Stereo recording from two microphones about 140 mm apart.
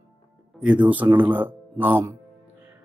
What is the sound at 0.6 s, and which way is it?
Speech, 10° right (ahead or behind).